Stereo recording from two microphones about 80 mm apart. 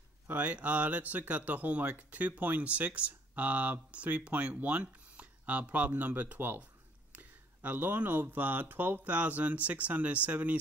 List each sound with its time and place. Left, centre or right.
0.3 s speech: centre